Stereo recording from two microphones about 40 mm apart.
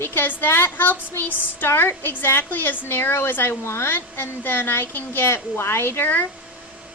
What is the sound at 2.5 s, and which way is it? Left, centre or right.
A woman's voice, left.